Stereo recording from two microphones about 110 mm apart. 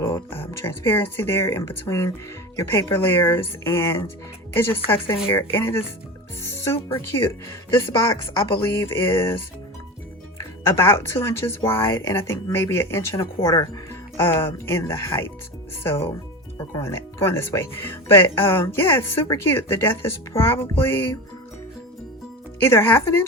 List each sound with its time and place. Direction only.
0.0 s speech: 25° left (ahead or behind)
8.7 s speech: 20° left (ahead or behind)
10.3 s speech: 25° left (ahead or behind)
22.6 s speech: 20° left (ahead or behind)